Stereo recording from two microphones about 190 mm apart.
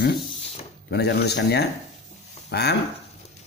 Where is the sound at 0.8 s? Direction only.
60° left (ahead or behind).